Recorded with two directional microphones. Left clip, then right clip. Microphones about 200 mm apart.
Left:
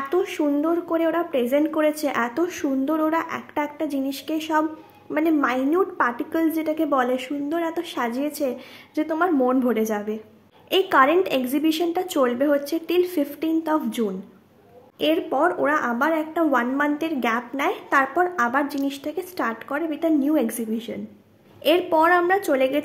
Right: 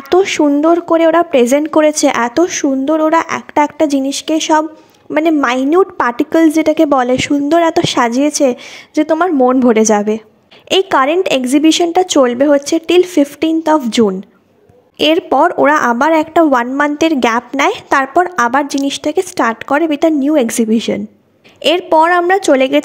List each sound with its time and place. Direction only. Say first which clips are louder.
0.1 s a woman's voice: right 14 dB; 40° right (ahead or behind)